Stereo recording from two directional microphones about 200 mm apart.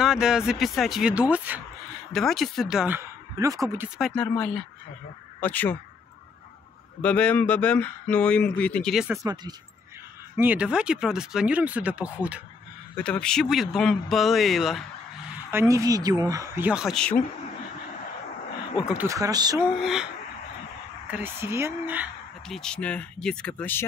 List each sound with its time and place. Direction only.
0.0 s speech: 5° right (ahead or behind)
3.3 s speech: 15° right (ahead or behind)
4.0 s speech: 5° left (ahead or behind)
7.0 s speech: 5° left (ahead or behind)
9.1 s speech: 20° right (ahead or behind)
10.3 s speech: 10° right (ahead or behind)
12.9 s speech: 5° left (ahead or behind)
15.5 s speech: 15° right (ahead or behind); by 17.2 s 5° left (ahead or behind)
18.9 s speech: 15° right (ahead or behind)
19.8 s speech: 5° right (ahead or behind)
21.1 s speech: 10° right (ahead or behind)
22.6 s speech: 5° left (ahead or behind)